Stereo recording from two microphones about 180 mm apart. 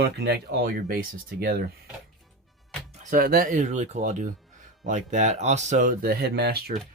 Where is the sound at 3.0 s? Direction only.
50° right (ahead or behind).